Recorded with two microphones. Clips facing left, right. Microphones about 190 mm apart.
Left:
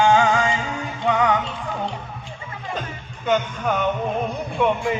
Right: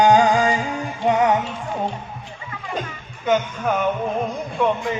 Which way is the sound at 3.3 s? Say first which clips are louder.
Right 1 dB; 5° right (ahead or behind).